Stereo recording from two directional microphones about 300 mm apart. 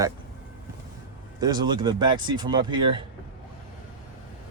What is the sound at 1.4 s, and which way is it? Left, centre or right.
Speech, centre.